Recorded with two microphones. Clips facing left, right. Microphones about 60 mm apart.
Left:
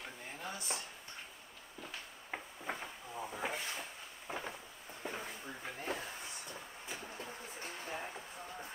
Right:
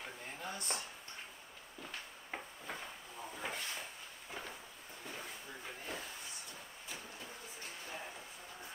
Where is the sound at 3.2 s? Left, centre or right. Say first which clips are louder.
Left 4 dB; centre.